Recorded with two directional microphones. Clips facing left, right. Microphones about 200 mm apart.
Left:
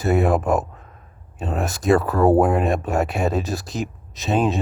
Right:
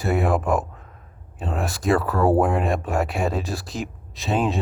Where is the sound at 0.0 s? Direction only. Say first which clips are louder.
Left 3 dB; 20° left (ahead or behind).